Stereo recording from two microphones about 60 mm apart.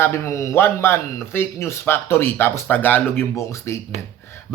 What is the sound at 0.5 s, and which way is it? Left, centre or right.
Speech, left.